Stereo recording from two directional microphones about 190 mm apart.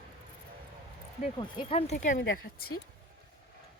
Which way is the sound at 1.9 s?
40° left (ahead or behind).